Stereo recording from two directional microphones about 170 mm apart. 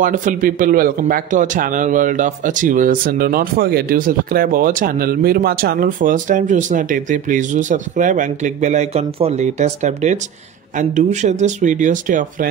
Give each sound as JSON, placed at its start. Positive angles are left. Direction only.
{"t": 0.0, "sound": "a man's voice", "side_deg": -50}